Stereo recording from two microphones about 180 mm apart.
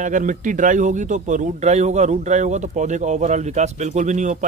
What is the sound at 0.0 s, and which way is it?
A man's voice, 45° right (ahead or behind).